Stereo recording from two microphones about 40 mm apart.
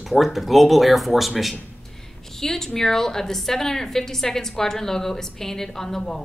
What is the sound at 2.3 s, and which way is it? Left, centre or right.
A woman's voice, centre.